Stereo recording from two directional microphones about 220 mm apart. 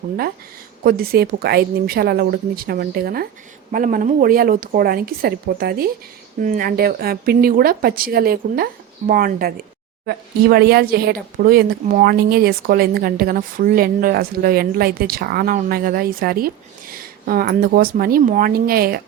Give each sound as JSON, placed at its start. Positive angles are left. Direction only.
{"t": 0.9, "sound": "speech", "side_deg": -45}